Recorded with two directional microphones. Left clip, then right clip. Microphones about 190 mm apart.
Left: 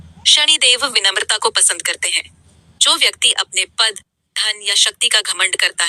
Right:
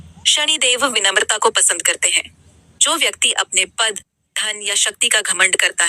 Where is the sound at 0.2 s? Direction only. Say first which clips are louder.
Left 4 dB; 15° left (ahead or behind).